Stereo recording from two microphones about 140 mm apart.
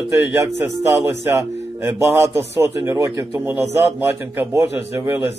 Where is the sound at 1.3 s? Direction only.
20° right (ahead or behind).